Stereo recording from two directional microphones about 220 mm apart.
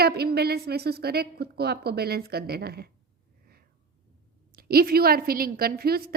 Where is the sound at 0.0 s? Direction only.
45° right (ahead or behind).